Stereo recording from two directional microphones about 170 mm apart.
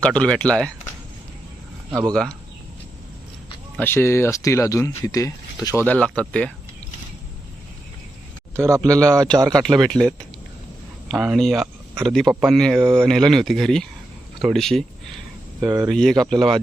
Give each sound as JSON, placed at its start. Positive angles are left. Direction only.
{"t": 0.0, "sound": "speech", "side_deg": 5}
{"t": 1.9, "sound": "speech", "side_deg": -20}
{"t": 3.8, "sound": "speech", "side_deg": 15}
{"t": 5.8, "sound": "speech", "side_deg": 5}
{"t": 8.5, "sound": "speech", "side_deg": -15}
{"t": 9.5, "sound": "speech", "side_deg": 0}
{"t": 15.6, "sound": "speech", "side_deg": -15}
{"t": 15.9, "sound": "speech", "side_deg": 0}